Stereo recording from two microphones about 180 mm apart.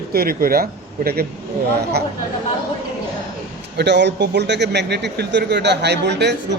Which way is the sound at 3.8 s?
75° right (ahead or behind).